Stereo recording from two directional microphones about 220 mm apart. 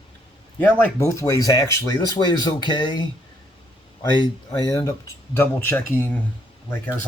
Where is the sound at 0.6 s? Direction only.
10° left (ahead or behind).